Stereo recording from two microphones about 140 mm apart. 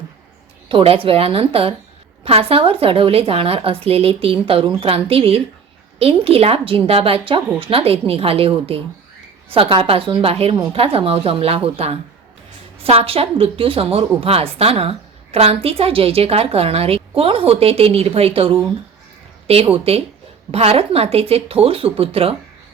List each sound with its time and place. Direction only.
0.7 s a woman's voice: 40° right (ahead or behind)